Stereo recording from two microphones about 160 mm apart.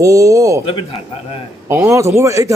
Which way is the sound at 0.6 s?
35° left (ahead or behind).